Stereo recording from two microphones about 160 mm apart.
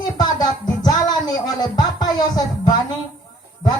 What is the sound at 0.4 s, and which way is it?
Music, 25° left (ahead or behind).